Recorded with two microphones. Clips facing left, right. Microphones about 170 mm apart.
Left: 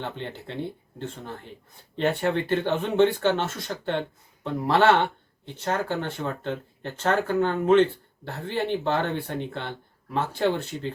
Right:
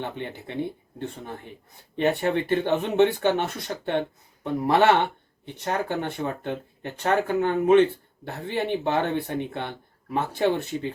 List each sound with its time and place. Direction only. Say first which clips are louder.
0.0 s speech: right 1 dB; 15° right (ahead or behind)